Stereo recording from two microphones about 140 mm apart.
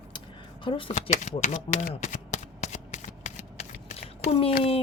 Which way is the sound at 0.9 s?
55° left (ahead or behind).